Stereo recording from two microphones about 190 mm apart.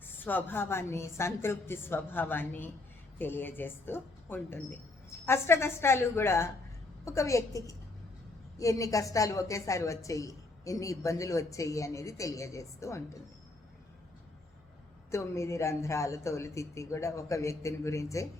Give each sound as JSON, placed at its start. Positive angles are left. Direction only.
{"t": 0.0, "sound": "a woman's voice", "side_deg": 10}
{"t": 15.1, "sound": "a woman's voice", "side_deg": 15}